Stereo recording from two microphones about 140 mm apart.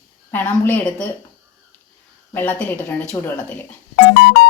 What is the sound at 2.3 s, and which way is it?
A woman's voice, 10° left (ahead or behind).